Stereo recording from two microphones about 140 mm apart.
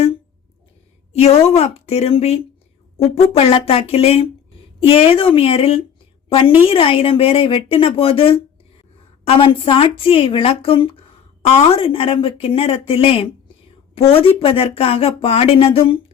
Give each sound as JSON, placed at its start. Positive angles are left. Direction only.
{"t": 1.1, "sound": "a woman's voice", "side_deg": 50}